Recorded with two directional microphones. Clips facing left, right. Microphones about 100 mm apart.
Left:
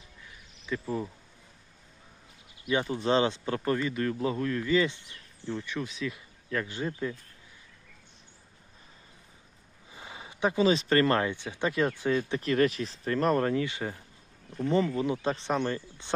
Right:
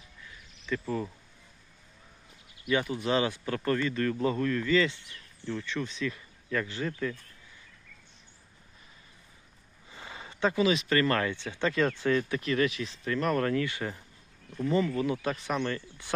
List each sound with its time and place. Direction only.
0.6 s speech: 10° left (ahead or behind)
2.6 s speech: 20° left (ahead or behind)
5.7 s speech: 10° left (ahead or behind)
6.7 s speech: 20° left (ahead or behind)
9.9 s a sound: 15° left (ahead or behind)
10.6 s speech: 35° left (ahead or behind)
11.2 s speech: 15° left (ahead or behind)
12.3 s speech: 40° left (ahead or behind)
13.4 s speech: 20° left (ahead or behind)
14.6 s speech: 30° left (ahead or behind)